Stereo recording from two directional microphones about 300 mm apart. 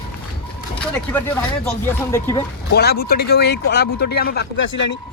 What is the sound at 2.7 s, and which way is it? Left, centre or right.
Speech, left.